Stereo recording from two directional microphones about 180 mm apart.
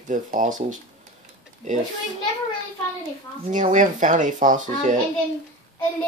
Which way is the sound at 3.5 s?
45° right (ahead or behind).